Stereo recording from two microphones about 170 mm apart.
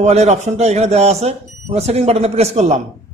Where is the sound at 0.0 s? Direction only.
40° right (ahead or behind).